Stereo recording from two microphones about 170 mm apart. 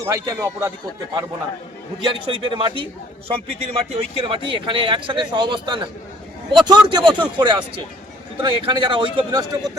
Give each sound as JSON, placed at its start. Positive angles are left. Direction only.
{"t": 0.0, "sound": "a man's voice", "side_deg": -20}
{"t": 2.0, "sound": "speech", "side_deg": -30}